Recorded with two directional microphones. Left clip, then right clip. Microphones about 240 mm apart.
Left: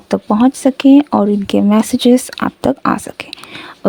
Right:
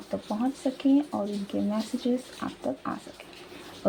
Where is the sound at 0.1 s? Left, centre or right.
Left.